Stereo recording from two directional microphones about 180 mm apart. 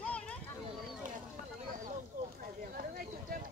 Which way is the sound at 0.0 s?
5° left (ahead or behind).